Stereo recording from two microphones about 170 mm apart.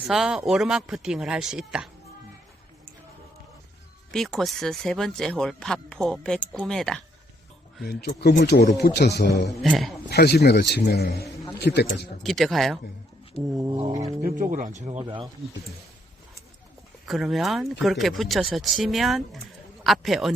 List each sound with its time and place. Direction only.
0.1 s speech: 5° right (ahead or behind)
4.1 s speech: 5° left (ahead or behind)
7.8 s a man's voice: 65° left (ahead or behind); by 9.5 s 85° left
9.6 s speech: centre (ahead or behind)
10.1 s a man's voice: 75° left (ahead or behind)
12.2 s speech: centre (ahead or behind)
13.6 s a sound: 25° right (ahead or behind)
14.2 s speech: 55° right (ahead or behind)
14.8 s speech: 35° right (ahead or behind)
17.1 s speech: centre (ahead or behind)